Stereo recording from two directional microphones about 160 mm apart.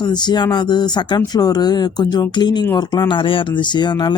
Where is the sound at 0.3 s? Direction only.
25° left (ahead or behind).